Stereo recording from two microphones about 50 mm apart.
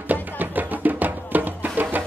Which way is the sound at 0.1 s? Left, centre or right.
Right.